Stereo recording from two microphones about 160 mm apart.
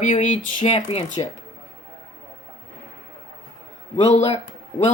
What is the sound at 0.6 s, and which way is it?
Speech, 35° left (ahead or behind).